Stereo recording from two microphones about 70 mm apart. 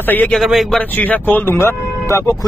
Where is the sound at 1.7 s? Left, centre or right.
Left.